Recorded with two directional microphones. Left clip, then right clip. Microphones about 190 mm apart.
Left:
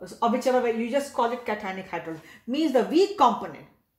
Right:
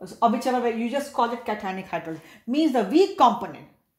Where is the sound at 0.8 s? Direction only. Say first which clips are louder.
Right 1 dB; 35° right (ahead or behind).